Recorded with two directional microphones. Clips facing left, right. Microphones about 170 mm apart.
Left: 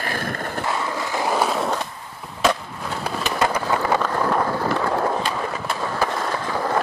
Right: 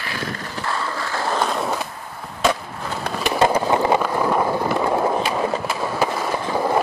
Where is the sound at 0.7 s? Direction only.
15° left (ahead or behind).